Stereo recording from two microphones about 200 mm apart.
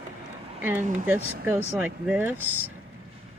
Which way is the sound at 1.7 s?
10° right (ahead or behind).